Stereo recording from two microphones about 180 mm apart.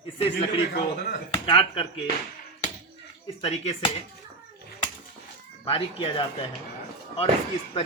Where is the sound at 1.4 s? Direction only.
30° left (ahead or behind).